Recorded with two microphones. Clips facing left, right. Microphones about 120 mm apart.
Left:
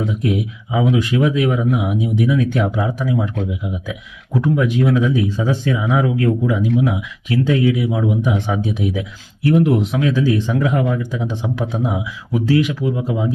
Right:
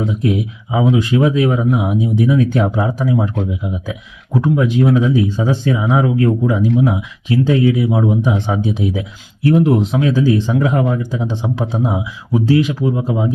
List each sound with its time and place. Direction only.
0.0 s speech: 30° right (ahead or behind)